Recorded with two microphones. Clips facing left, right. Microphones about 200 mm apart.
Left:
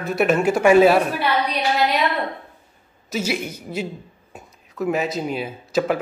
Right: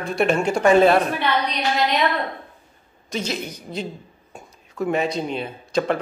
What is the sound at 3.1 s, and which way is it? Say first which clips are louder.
Speech: left 3 dB; 10° left (ahead or behind).